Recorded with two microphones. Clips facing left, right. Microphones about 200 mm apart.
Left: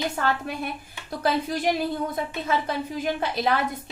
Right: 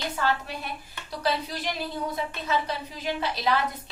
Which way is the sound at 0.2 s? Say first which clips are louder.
Left 2 dB; 50° left (ahead or behind).